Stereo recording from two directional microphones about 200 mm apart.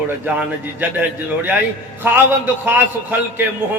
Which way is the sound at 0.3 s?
10° right (ahead or behind).